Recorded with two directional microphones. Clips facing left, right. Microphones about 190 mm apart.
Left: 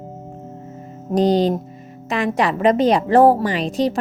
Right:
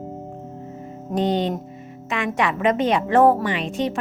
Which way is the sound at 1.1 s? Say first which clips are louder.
Left 5 dB; 35° left (ahead or behind).